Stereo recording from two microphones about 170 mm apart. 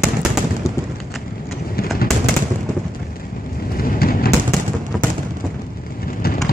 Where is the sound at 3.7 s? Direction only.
60° left (ahead or behind).